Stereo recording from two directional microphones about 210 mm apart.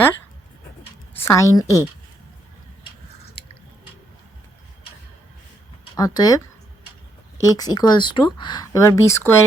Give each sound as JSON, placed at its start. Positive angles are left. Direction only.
{"t": 1.1, "sound": "a woman's voice", "side_deg": 15}
{"t": 6.0, "sound": "speech", "side_deg": 20}